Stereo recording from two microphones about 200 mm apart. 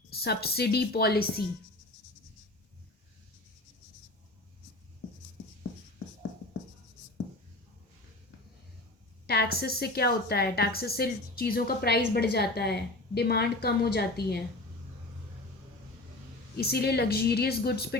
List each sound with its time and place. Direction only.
0.2 s a woman's voice: 50° left (ahead or behind)
9.2 s a woman's voice: 50° left (ahead or behind)
16.6 s a woman's voice: 50° left (ahead or behind)